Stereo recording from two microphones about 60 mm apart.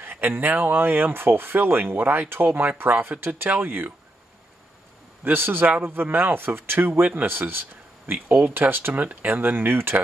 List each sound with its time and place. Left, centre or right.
0.0 s speech: right
5.2 s speech: right
8.9 s speech: right